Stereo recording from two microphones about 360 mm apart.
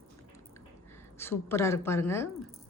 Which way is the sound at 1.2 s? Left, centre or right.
Centre.